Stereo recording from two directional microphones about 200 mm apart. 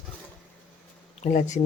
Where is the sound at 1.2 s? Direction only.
35° left (ahead or behind).